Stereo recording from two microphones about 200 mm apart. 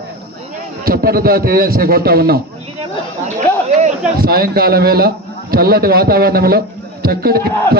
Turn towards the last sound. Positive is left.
turn(degrees=-50)  # may be behind; listen again after turning